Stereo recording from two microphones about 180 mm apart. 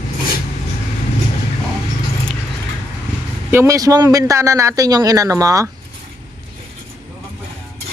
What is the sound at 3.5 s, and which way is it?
A man's voice, 15° right (ahead or behind).